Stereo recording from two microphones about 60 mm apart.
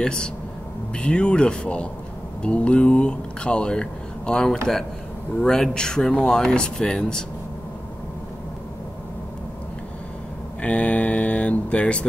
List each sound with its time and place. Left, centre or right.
0.0 s speech: centre
10.6 s speech: left